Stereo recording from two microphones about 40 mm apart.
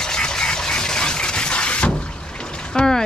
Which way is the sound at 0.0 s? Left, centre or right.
Centre.